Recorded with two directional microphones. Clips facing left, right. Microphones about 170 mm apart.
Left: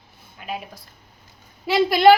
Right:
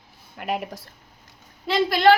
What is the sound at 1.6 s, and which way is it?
Speech, 10° left (ahead or behind).